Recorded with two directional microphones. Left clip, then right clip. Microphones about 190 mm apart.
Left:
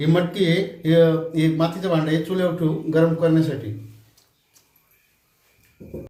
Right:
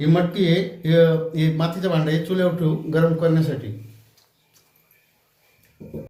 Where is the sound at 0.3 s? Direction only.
5° left (ahead or behind).